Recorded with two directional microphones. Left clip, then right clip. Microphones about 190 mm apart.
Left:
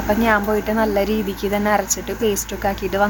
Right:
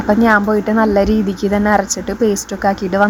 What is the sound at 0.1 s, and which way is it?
Speech, 30° right (ahead or behind).